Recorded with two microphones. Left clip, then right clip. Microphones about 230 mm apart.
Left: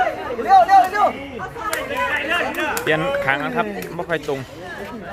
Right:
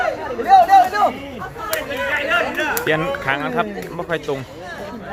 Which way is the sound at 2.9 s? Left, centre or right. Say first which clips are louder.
Left 4 dB; centre.